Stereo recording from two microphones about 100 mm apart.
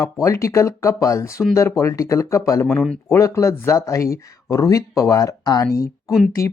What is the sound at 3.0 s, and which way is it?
Speech, 30° left (ahead or behind).